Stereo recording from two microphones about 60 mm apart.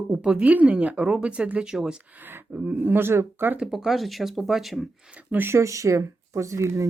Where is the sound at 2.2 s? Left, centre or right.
Right.